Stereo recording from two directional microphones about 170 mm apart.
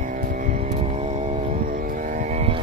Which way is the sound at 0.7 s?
40° right (ahead or behind).